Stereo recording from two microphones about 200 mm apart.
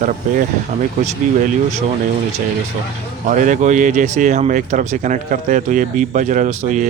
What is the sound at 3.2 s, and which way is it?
A man's voice, 40° right (ahead or behind).